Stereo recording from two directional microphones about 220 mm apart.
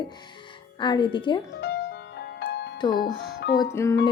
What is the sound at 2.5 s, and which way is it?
Music, 50° left (ahead or behind).